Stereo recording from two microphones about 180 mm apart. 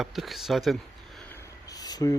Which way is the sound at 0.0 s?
Centre (ahead or behind).